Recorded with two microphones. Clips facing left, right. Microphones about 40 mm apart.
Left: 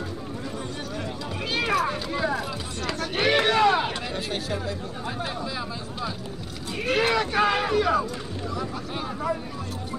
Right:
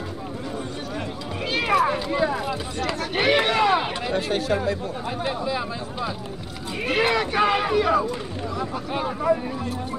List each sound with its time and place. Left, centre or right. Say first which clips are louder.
1.5 s a sound: right 4 dB; centre
4.1 s speech: right 6 dB; right
6.9 s speech: right 1 dB; centre